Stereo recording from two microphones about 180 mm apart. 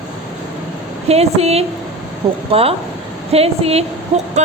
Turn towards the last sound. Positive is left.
turn(degrees=-35)  # may be behind; listen again after turning